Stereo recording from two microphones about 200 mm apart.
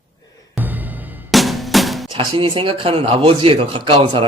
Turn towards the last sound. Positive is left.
turn(degrees=-30)  # may be behind; listen again after turning